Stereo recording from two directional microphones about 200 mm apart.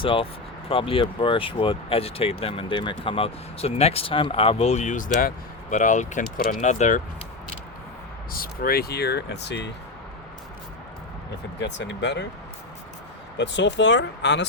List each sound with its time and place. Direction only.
0.0 s speech: 25° left (ahead or behind)
8.3 s speech: 45° left (ahead or behind)
11.6 s speech: 60° left (ahead or behind)
13.3 s speech: 60° left (ahead or behind)